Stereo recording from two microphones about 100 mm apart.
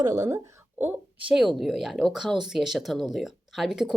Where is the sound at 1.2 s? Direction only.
5° right (ahead or behind).